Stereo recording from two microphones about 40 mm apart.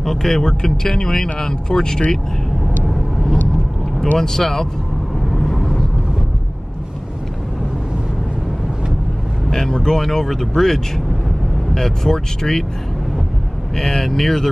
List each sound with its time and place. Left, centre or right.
0.0 s speech: centre
4.2 s speech: centre
5.3 s vehicle: centre
9.7 s speech: centre
13.7 s speech: centre